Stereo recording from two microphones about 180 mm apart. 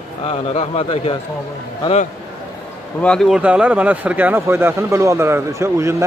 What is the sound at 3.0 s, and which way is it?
A man's voice, 5° left (ahead or behind).